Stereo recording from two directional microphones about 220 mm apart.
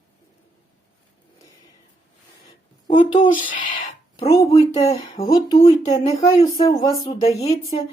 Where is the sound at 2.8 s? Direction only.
20° left (ahead or behind).